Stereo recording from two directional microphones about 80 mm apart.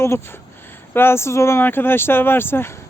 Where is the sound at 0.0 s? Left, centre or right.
Left.